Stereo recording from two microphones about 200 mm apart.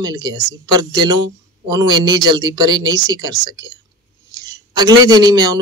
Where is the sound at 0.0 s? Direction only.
20° right (ahead or behind).